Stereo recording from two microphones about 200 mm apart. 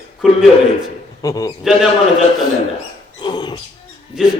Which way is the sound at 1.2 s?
15° left (ahead or behind).